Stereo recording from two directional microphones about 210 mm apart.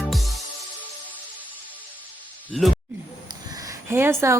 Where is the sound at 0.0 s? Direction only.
Centre (ahead or behind).